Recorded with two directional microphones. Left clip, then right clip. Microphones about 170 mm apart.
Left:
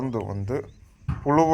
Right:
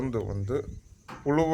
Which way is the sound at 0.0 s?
20° left (ahead or behind).